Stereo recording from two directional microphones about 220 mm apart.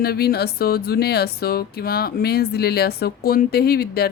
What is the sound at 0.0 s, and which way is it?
Speech, 45° left (ahead or behind).